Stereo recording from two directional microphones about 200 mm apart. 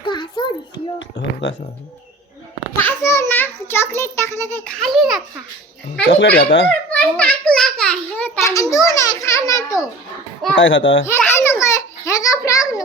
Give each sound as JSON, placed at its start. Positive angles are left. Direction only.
{"t": 0.0, "sound": "a sound", "side_deg": 25}
{"t": 0.9, "sound": "a sound", "side_deg": 65}
{"t": 2.7, "sound": "a child's voice", "side_deg": 10}
{"t": 6.1, "sound": "speech", "side_deg": 55}
{"t": 6.7, "sound": "a child's voice", "side_deg": 5}
{"t": 10.5, "sound": "speech", "side_deg": 70}
{"t": 11.0, "sound": "a child's voice", "side_deg": 10}